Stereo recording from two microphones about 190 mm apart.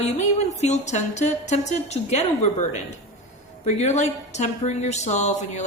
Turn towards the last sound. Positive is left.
turn(degrees=35)  # may be behind; listen again after turning